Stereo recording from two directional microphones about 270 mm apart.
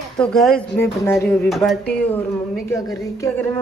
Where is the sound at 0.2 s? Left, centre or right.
Centre.